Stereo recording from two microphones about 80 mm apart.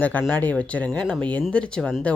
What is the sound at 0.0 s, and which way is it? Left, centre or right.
Speech, left.